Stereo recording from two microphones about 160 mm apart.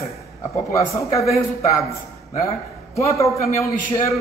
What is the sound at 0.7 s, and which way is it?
A man's voice, 20° left (ahead or behind).